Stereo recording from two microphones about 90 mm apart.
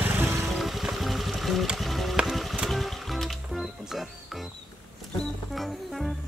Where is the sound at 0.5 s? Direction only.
5° right (ahead or behind).